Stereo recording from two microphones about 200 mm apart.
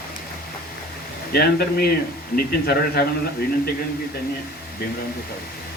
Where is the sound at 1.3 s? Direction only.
50° left (ahead or behind).